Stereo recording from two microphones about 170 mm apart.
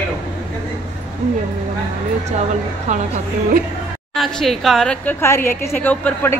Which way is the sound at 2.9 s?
45° right (ahead or behind).